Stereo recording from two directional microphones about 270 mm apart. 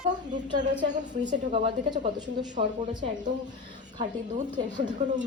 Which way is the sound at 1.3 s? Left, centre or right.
Centre.